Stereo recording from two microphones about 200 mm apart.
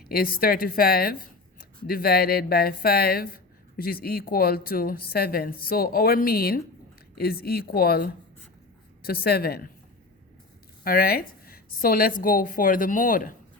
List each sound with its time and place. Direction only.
0.0 s a woman's voice: 45° left (ahead or behind)
10.8 s a woman's voice: 50° left (ahead or behind)